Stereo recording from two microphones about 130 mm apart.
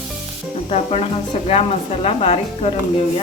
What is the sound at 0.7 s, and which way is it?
Speech, 50° left (ahead or behind).